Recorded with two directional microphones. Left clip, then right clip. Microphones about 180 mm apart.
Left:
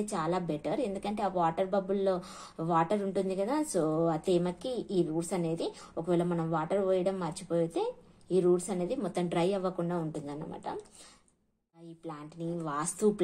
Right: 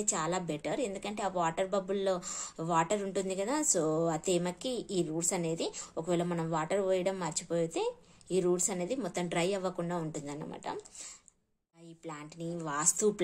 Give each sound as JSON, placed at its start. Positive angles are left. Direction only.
{"t": 0.0, "sound": "a woman's voice", "side_deg": -15}
{"t": 12.1, "sound": "speech", "side_deg": -15}